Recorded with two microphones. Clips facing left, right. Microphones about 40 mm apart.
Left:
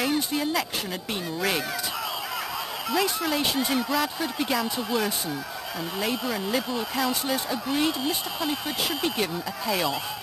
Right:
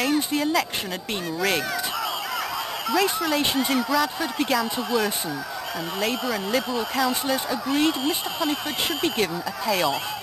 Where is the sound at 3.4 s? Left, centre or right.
Centre.